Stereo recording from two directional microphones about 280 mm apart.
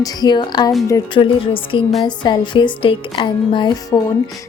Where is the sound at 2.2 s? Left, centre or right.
Centre.